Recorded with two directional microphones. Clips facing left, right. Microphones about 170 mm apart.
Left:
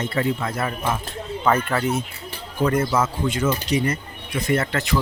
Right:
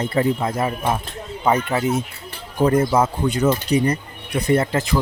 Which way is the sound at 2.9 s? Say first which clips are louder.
Right 3 dB; 35° right (ahead or behind).